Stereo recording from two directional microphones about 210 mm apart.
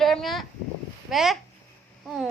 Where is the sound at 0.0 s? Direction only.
Centre (ahead or behind).